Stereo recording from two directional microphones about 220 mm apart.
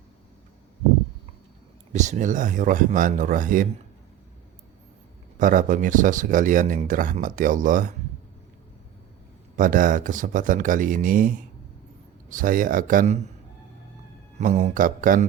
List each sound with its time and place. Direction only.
1.9 s speech: 35° right (ahead or behind)
5.4 s speech: 35° right (ahead or behind)
9.6 s speech: 35° right (ahead or behind)
14.3 s speech: 30° right (ahead or behind)